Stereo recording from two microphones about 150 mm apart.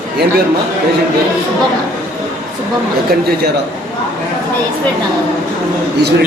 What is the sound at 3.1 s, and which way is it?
Speech, 90° right.